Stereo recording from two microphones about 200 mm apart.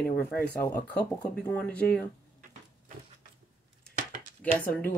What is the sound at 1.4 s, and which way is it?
Speech, 5° left (ahead or behind).